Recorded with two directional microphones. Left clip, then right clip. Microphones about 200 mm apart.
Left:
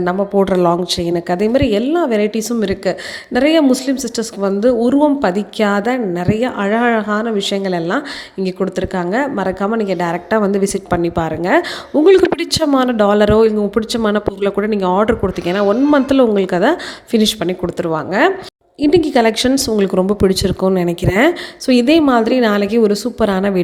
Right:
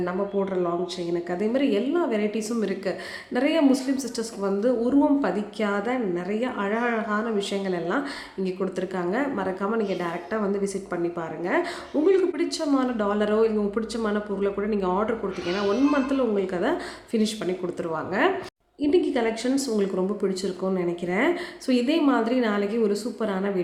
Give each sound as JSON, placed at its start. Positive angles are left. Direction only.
{"t": 0.0, "sound": "a woman's voice", "side_deg": 45}